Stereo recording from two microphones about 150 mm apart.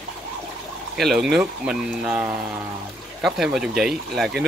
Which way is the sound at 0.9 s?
Centre (ahead or behind).